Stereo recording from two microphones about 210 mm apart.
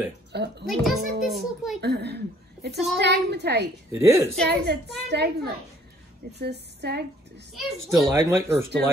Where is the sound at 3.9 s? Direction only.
10° right (ahead or behind).